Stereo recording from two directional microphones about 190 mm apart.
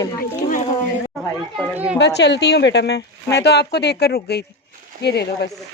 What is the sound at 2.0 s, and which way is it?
Speech, 65° left (ahead or behind).